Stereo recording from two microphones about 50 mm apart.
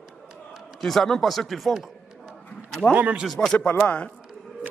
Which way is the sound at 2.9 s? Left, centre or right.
Right.